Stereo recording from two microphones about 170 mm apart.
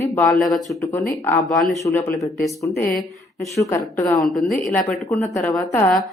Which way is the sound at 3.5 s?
15° left (ahead or behind).